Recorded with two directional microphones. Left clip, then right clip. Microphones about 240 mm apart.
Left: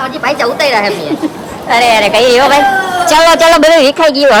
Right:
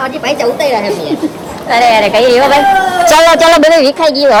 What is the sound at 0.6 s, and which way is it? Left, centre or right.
Speech, left.